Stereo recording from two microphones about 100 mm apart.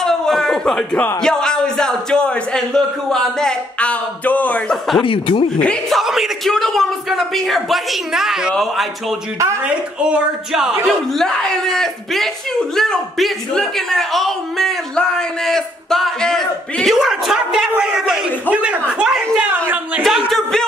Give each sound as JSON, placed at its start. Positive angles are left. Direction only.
{"t": 0.0, "sound": "chuckle", "side_deg": 5}
{"t": 1.2, "sound": "speech", "side_deg": 5}
{"t": 5.0, "sound": "speech", "side_deg": 65}
{"t": 5.6, "sound": "speech", "side_deg": 10}
{"t": 5.9, "sound": "speech", "side_deg": -5}
{"t": 10.0, "sound": "speech", "side_deg": -10}
{"t": 20.0, "sound": "speech", "side_deg": 0}